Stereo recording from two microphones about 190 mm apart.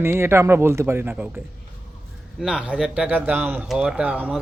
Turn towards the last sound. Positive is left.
turn(degrees=-5)  # may be behind; listen again after turning